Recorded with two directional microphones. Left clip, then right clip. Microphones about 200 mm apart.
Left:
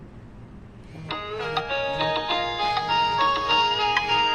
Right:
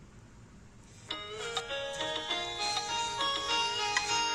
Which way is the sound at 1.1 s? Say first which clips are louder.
Left 9 dB; 20° right (ahead or behind).